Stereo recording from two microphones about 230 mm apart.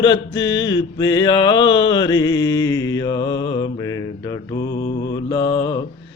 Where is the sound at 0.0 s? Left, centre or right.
Centre.